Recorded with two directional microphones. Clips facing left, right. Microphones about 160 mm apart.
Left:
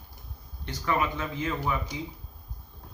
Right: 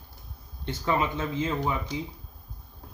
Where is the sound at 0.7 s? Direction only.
25° right (ahead or behind).